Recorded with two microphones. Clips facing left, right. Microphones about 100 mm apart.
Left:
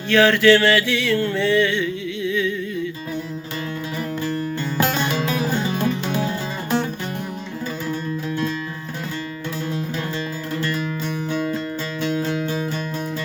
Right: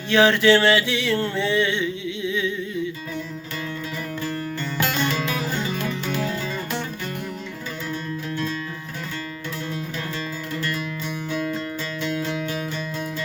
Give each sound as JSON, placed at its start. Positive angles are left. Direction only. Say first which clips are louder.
{"t": 0.1, "sound": "mantra", "louder": "left 2 dB", "side_deg": -20}
{"t": 5.2, "sound": "music", "louder": "left 4 dB", "side_deg": 35}
{"t": 12.2, "sound": "music", "louder": "left 3 dB", "side_deg": 35}